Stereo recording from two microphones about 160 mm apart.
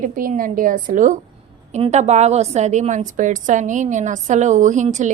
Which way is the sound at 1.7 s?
40° right (ahead or behind).